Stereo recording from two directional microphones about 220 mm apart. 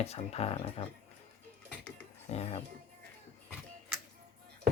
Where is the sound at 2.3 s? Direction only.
30° left (ahead or behind).